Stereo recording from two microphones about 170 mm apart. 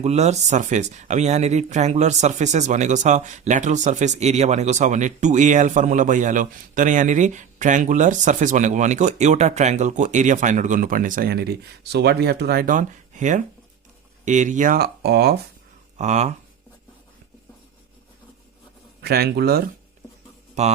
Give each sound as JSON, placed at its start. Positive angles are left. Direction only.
{"t": 0.0, "sound": "speech", "side_deg": -40}
{"t": 16.0, "sound": "speech", "side_deg": -45}
{"t": 19.0, "sound": "speech", "side_deg": -70}